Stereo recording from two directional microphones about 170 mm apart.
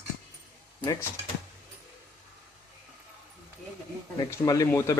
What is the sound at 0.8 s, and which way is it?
Speech, 20° left (ahead or behind).